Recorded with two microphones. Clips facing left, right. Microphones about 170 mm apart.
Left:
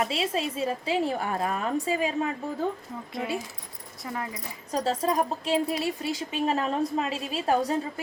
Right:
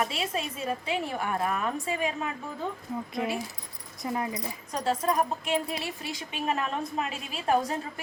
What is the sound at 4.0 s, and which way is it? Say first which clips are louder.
Speech: right 3 dB; 20° right (ahead or behind).